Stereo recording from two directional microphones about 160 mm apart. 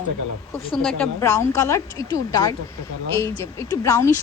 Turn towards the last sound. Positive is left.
turn(degrees=20)  # may be behind; listen again after turning